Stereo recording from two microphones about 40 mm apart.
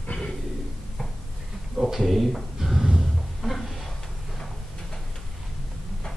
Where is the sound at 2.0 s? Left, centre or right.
Centre.